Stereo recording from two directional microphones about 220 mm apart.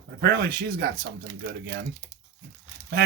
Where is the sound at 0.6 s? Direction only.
50° right (ahead or behind).